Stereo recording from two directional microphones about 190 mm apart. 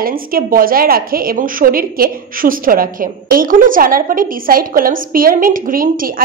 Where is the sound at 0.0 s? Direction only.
50° right (ahead or behind).